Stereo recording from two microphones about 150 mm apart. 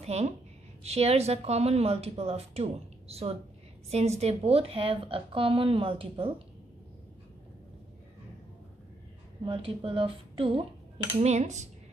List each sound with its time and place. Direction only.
0.0 s a woman's voice: 45° right (ahead or behind)
9.4 s a woman's voice: 35° right (ahead or behind)
11.1 s a woman's voice: 50° right (ahead or behind)